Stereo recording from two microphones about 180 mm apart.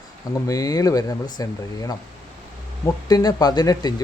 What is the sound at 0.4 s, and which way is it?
Speech, 20° left (ahead or behind).